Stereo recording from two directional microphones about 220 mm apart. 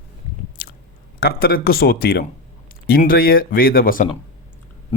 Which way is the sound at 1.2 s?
45° left (ahead or behind).